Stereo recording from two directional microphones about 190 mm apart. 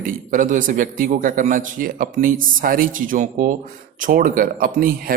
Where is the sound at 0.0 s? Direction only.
45° right (ahead or behind).